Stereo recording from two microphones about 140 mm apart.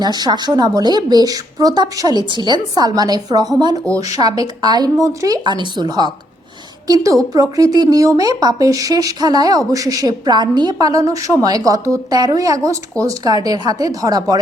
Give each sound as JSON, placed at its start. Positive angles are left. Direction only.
{"t": 0.0, "sound": "speech", "side_deg": -30}